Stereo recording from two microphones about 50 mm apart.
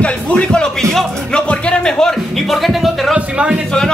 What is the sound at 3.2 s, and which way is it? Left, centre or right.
Speech, right.